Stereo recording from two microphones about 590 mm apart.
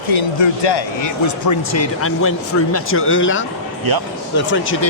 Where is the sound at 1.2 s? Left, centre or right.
Left.